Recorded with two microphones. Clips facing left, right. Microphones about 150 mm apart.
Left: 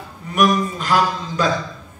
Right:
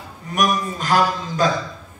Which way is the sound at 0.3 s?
45° right (ahead or behind).